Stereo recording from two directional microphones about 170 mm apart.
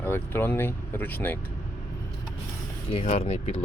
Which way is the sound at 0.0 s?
10° left (ahead or behind).